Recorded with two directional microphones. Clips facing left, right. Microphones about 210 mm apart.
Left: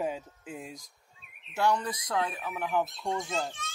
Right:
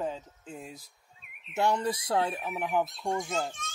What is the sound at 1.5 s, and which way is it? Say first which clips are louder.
Speech: right 1 dB; 25° right (ahead or behind).